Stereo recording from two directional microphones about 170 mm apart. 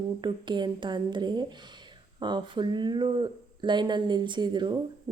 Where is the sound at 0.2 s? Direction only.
25° right (ahead or behind).